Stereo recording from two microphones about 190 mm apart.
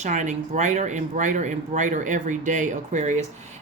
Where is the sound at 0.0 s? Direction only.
40° right (ahead or behind).